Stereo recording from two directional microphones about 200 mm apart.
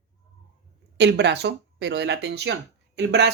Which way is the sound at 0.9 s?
60° right (ahead or behind).